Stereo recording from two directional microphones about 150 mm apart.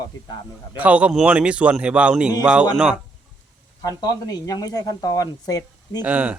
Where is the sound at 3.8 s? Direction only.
25° left (ahead or behind).